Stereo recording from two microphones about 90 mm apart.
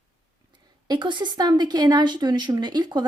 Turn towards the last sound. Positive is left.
turn(degrees=-55)  # may be behind; listen again after turning